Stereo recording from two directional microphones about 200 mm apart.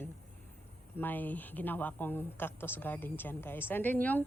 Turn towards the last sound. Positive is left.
turn(degrees=10)  # may be behind; listen again after turning